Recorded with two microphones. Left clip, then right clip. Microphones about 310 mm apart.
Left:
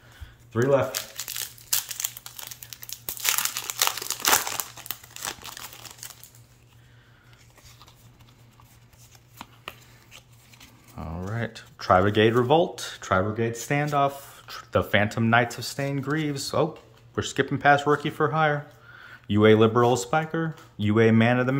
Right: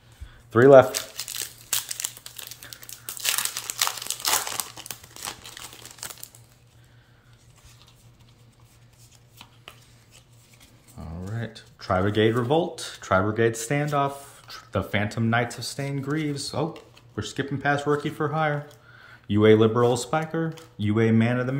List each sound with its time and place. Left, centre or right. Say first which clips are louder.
0.5 s speech: right 9 dB; centre
2.5 s crumpling: left 1 dB; centre
11.0 s speech: left 5 dB; centre